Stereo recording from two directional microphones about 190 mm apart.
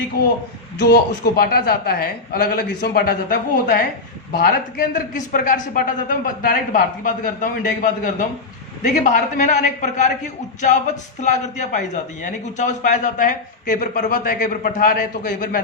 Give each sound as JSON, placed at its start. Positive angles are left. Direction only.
{"t": 0.8, "sound": "a man's voice", "side_deg": 60}